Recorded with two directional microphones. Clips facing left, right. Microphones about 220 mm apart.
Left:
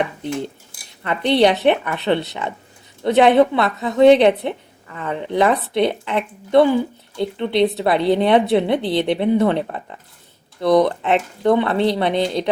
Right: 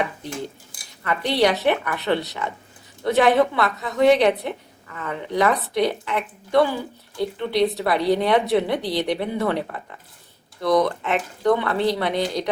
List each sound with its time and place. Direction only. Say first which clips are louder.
1.0 s speech: left 4 dB; 25° left (ahead or behind)